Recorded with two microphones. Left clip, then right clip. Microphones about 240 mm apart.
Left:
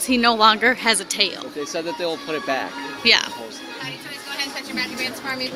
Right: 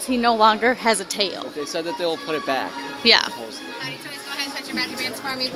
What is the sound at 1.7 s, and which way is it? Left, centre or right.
Speech, right.